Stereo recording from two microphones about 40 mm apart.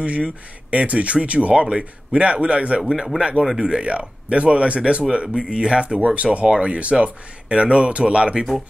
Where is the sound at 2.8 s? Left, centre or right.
Centre.